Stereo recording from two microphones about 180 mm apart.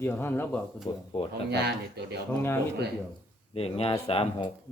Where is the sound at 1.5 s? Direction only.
65° right (ahead or behind).